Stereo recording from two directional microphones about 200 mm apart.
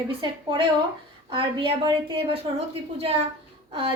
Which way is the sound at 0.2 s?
25° right (ahead or behind).